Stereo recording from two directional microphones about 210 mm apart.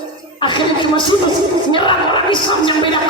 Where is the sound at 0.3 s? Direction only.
20° left (ahead or behind).